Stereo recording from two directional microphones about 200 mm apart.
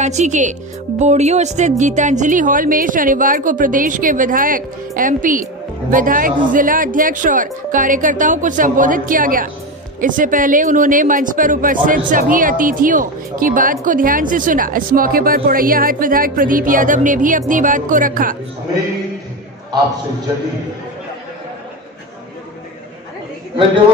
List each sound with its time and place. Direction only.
0.0 s speech: 35° right (ahead or behind)